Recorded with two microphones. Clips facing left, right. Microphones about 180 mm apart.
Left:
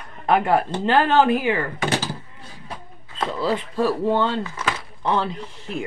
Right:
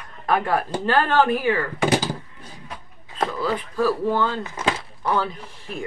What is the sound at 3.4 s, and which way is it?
Speech, 25° left (ahead or behind).